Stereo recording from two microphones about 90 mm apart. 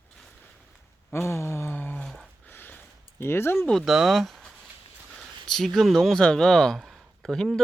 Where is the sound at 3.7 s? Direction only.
Centre (ahead or behind).